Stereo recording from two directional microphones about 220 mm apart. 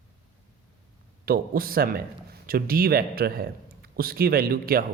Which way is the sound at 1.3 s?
40° right (ahead or behind).